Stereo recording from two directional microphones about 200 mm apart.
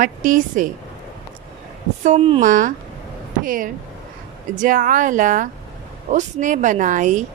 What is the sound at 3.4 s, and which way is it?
Speech, 45° right (ahead or behind).